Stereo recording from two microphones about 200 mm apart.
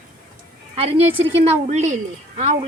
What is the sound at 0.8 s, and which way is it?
A woman's voice, 30° right (ahead or behind).